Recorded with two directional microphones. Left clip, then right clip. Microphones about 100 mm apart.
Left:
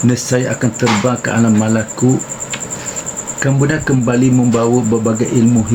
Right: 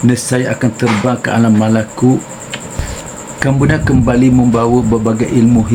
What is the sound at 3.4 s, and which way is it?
Speech, 25° right (ahead or behind).